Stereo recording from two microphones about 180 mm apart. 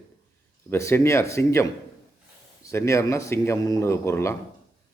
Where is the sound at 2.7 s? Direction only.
15° left (ahead or behind).